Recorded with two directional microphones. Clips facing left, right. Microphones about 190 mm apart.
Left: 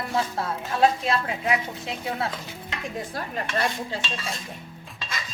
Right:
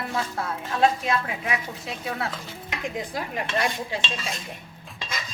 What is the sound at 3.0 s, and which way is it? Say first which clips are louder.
Dishes: left 1 dB; 15° right (ahead or behind).